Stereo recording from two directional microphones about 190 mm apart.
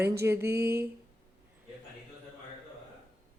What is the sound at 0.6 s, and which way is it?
Speech, 55° right (ahead or behind).